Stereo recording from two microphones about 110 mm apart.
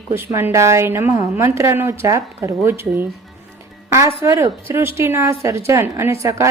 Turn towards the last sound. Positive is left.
turn(degrees=-30)  # may be behind; listen again after turning